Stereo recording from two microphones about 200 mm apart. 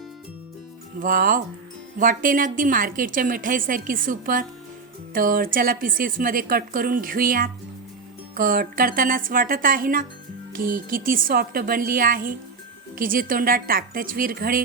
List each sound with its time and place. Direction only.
0.9 s a woman's voice: 45° right (ahead or behind)